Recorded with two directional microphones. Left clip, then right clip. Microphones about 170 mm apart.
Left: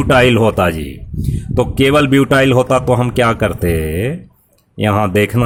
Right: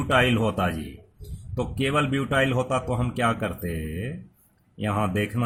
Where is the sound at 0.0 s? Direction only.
50° left (ahead or behind).